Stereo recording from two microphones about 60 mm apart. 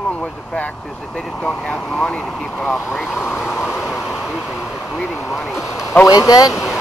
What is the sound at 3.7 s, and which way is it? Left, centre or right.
Vehicle, centre.